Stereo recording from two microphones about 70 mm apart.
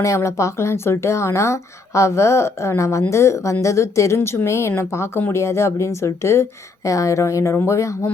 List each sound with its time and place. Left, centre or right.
0.0 s speech: left